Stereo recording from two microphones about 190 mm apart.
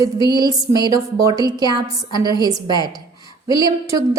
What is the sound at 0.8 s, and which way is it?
A woman's voice, 20° right (ahead or behind).